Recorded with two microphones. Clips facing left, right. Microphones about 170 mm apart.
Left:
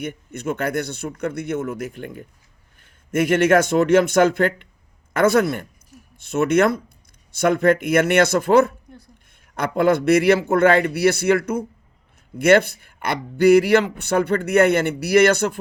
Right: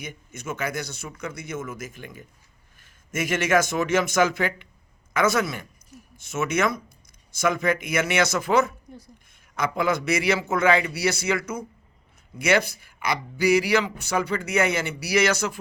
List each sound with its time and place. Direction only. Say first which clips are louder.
0.0 s speech: left 9 dB; 60° left (ahead or behind)